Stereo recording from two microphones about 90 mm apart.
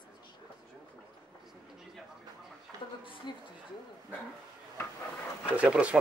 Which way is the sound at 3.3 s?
55° left (ahead or behind).